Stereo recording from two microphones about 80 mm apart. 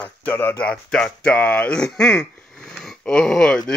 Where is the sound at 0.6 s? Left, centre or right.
Centre.